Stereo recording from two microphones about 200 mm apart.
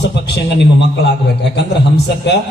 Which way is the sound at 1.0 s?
55° left (ahead or behind).